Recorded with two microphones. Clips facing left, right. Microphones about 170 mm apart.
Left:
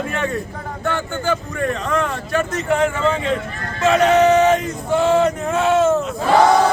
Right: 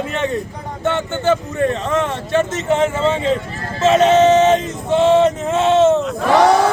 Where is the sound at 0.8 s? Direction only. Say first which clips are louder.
Right 4 dB; 25° right (ahead or behind).